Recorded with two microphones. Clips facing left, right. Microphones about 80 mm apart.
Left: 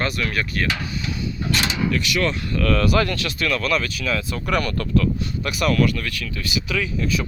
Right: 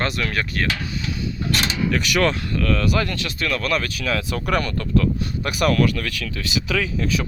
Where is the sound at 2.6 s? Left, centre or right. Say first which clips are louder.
Left 3 dB; centre; by 4.4 s right.